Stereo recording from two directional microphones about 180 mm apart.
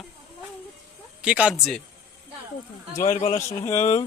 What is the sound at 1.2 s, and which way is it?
Speech, 5° right (ahead or behind).